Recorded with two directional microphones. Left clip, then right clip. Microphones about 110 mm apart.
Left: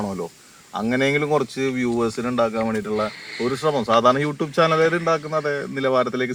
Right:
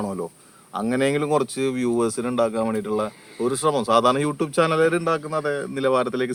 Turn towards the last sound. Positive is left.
turn(degrees=-30)  # may be behind; listen again after turning